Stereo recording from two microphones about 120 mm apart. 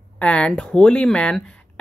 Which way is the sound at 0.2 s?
10° left (ahead or behind).